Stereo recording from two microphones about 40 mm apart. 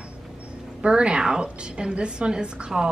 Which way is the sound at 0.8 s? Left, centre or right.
Right.